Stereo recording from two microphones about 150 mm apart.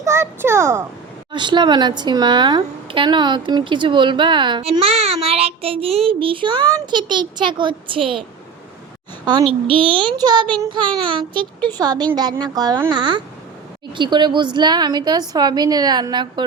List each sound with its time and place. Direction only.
0.0 s a child's voice: 20° right (ahead or behind)
1.3 s a woman's voice: 30° right (ahead or behind)
9.2 s a woman's voice: 35° right (ahead or behind)